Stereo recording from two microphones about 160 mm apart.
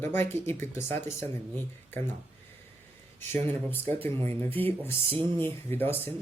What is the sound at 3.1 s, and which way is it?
Speech, 10° left (ahead or behind).